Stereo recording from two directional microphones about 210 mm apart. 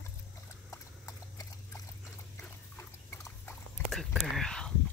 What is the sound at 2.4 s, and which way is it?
Dog, 10° left (ahead or behind).